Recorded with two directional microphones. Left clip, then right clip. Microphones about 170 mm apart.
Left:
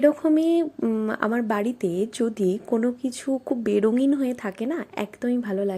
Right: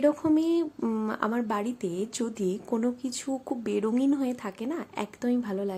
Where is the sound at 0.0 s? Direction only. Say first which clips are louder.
Left 5 dB; 15° left (ahead or behind).